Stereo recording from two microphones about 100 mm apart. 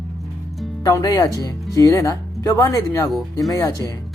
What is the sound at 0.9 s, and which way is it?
Speech, 35° left (ahead or behind).